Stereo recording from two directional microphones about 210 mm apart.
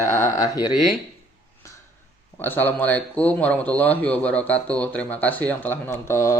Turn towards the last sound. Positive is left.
turn(degrees=15)  # may be behind; listen again after turning